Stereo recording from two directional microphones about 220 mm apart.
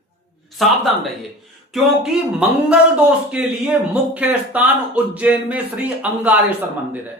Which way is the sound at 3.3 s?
5° right (ahead or behind).